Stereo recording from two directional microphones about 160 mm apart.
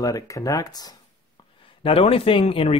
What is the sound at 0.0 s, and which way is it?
Speech, 20° left (ahead or behind).